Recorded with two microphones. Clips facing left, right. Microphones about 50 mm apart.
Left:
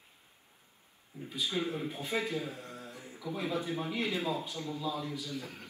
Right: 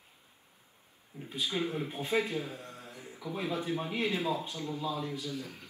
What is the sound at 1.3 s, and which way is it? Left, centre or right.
Speech, right.